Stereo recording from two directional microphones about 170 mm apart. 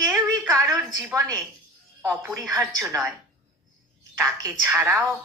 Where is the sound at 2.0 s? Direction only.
20° right (ahead or behind).